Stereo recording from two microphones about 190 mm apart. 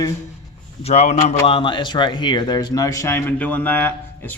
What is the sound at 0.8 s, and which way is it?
A man's voice, 35° left (ahead or behind).